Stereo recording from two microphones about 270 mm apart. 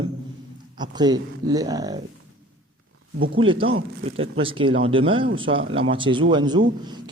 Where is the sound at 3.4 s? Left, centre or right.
Centre.